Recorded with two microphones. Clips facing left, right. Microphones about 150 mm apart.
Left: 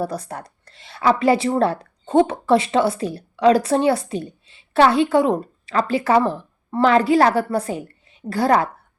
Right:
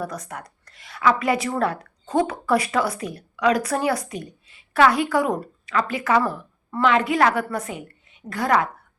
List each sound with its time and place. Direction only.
0.0 s a woman's voice: 30° left (ahead or behind)